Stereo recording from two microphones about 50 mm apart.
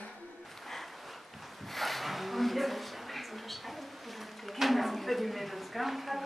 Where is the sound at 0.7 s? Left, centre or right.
Centre.